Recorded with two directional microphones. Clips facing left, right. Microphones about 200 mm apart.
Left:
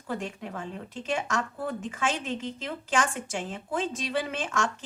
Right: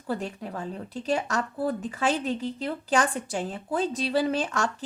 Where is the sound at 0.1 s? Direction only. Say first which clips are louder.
Right 3 dB; 35° right (ahead or behind).